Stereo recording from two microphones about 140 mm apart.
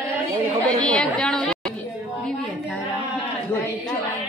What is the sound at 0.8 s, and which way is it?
Speech, 5° left (ahead or behind).